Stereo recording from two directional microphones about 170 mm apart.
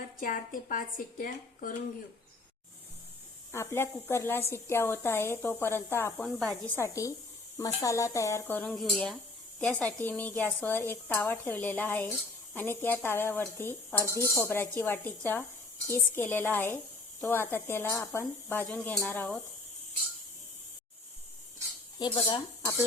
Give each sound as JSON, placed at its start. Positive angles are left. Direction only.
{"t": 0.2, "sound": "speech", "side_deg": 55}
{"t": 3.5, "sound": "speech", "side_deg": 15}
{"t": 6.2, "sound": "speech", "side_deg": 5}
{"t": 6.7, "sound": "speech", "side_deg": 20}
{"t": 21.9, "sound": "dishes", "side_deg": 25}